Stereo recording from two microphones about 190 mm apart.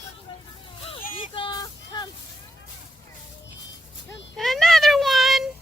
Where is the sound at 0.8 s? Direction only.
30° left (ahead or behind).